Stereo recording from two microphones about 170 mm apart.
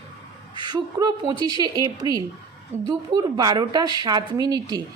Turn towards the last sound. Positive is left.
turn(degrees=-20)  # may be behind; listen again after turning